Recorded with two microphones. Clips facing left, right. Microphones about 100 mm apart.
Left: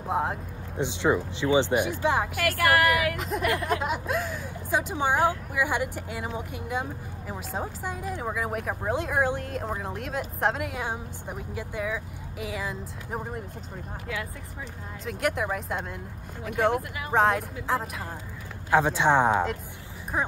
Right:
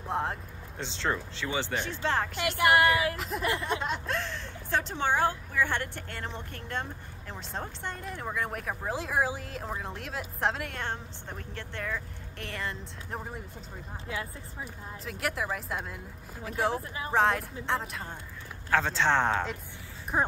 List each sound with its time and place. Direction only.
0.0 s speech: 5° left (ahead or behind)
0.7 s speech: 15° left (ahead or behind)
2.3 s speech: 20° right (ahead or behind)
3.2 s speech: centre (ahead or behind)
14.1 s speech: 30° right (ahead or behind)
14.6 s speech: centre (ahead or behind)
16.7 s speech: 30° right (ahead or behind)
17.1 s speech: centre (ahead or behind)
18.7 s speech: 15° left (ahead or behind)
20.1 s speech: 20° right (ahead or behind)